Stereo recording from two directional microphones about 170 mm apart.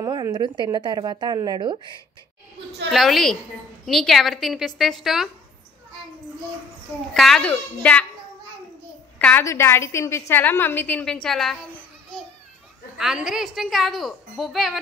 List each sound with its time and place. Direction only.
0.0 s a woman's voice: 20° right (ahead or behind)
2.9 s a woman's voice: centre (ahead or behind)
7.2 s a woman's voice: 5° left (ahead or behind)
9.2 s a woman's voice: 15° left (ahead or behind)
12.9 s a woman's voice: 5° right (ahead or behind)